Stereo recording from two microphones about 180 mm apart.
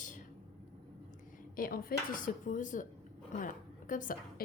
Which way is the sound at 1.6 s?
55° left (ahead or behind).